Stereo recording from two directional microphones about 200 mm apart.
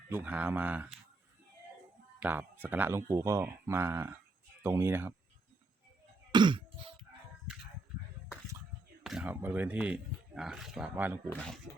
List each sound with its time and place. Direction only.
0.1 s speech: 10° right (ahead or behind)
2.1 s speech: 10° right (ahead or behind)
6.3 s cough: 25° right (ahead or behind)
9.0 s speech: 5° right (ahead or behind)
11.3 s speech: 5° left (ahead or behind)